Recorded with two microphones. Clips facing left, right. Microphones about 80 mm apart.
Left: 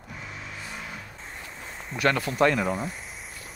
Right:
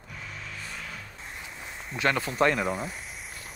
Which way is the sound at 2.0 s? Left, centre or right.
Right.